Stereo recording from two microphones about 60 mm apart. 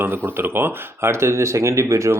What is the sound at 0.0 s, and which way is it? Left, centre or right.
Speech, right.